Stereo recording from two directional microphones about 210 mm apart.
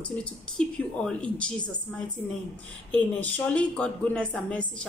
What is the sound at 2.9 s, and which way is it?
A woman's voice, 5° left (ahead or behind).